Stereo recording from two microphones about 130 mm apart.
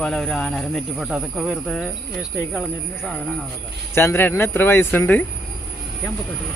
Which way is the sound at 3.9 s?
20° left (ahead or behind).